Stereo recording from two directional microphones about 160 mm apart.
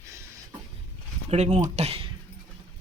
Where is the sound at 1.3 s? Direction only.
45° right (ahead or behind).